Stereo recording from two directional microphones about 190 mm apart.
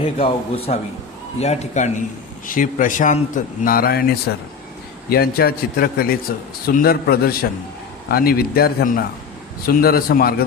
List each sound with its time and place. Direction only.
0.0 s a man's voice: 30° left (ahead or behind); by 10.3 s 50° left (ahead or behind)